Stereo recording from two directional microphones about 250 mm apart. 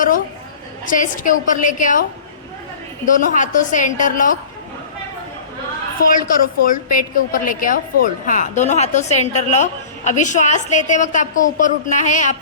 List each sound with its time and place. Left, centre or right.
0.9 s a woman's voice: left
3.1 s a woman's voice: left
6.0 s a woman's voice: left